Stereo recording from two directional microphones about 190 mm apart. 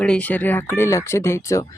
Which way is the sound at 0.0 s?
5° left (ahead or behind).